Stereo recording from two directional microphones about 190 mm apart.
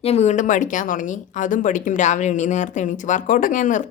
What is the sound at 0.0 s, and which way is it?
Speech, 35° left (ahead or behind).